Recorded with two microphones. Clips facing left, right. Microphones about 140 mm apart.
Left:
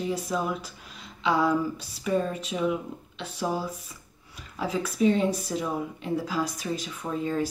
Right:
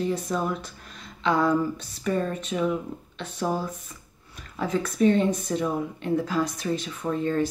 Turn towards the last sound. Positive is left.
turn(degrees=10)  # may be behind; listen again after turning